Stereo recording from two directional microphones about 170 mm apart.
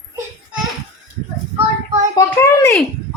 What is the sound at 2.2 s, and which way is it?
Speech, 15° left (ahead or behind).